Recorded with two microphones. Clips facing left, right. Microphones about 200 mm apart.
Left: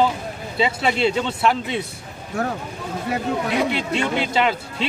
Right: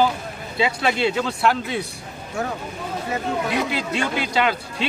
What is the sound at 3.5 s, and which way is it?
Speech, centre (ahead or behind).